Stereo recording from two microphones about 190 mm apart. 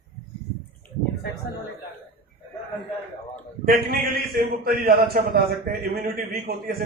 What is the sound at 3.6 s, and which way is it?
A man's voice, 55° right (ahead or behind).